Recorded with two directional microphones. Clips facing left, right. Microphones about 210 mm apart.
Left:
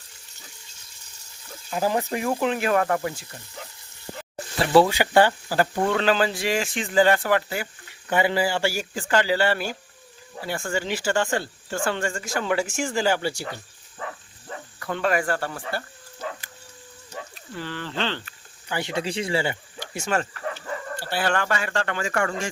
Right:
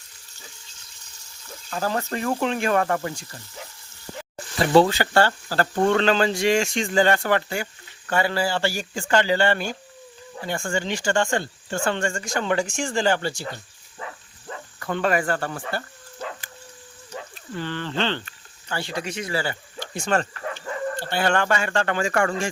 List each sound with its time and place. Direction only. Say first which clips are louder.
1.7 s speech: left 2 dB; 15° left (ahead or behind)
4.8 s speech: left 2 dB; 15° left (ahead or behind)
8.0 s speech: left 1 dB; 15° left (ahead or behind)
15.0 s speech: right 1 dB; centre (ahead or behind)
17.6 s speech: right 3 dB; 5° left (ahead or behind)
18.7 s speech: left 2 dB; 20° left (ahead or behind)
19.9 s speech: right 2 dB; 5° left (ahead or behind)
21.8 s speech: right 3 dB; 30° right (ahead or behind)